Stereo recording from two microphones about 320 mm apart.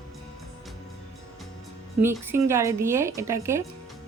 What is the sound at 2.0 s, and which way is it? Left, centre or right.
Speech, centre.